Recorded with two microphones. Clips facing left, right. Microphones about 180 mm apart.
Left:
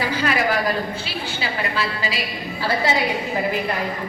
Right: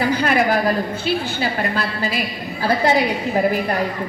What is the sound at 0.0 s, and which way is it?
A woman's voice, 50° right (ahead or behind).